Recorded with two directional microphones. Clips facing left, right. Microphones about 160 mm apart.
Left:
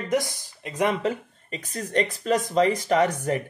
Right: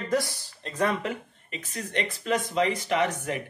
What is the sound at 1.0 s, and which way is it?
Speech, 35° left (ahead or behind).